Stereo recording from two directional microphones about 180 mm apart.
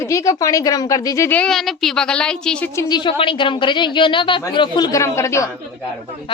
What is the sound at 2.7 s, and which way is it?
A woman's voice, 25° left (ahead or behind).